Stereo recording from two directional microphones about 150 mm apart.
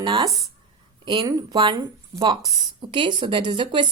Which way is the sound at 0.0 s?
35° right (ahead or behind).